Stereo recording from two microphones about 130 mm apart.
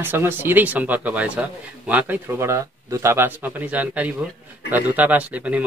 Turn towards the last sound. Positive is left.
turn(degrees=-10)  # may be behind; listen again after turning